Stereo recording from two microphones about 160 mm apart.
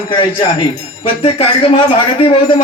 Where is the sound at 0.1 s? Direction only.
30° left (ahead or behind).